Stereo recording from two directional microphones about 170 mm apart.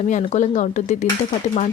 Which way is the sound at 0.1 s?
45° left (ahead or behind).